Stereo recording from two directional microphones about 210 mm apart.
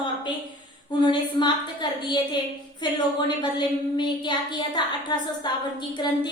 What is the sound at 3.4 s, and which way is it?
A woman's voice, 20° left (ahead or behind).